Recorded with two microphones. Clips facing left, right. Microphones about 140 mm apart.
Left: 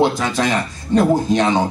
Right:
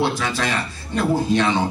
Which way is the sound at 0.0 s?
15° left (ahead or behind).